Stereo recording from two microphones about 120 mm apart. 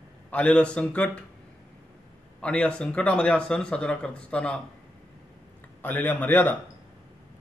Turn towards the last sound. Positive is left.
turn(degrees=15)  # may be behind; listen again after turning